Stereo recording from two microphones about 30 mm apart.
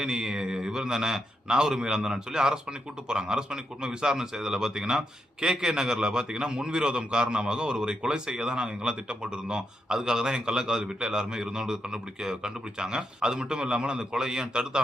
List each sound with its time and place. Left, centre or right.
0.0 s a man's voice: right